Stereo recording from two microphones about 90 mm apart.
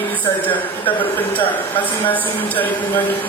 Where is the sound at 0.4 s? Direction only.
20° left (ahead or behind).